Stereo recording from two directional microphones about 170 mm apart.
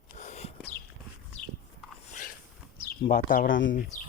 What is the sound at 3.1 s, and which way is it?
Speech, 55° left (ahead or behind).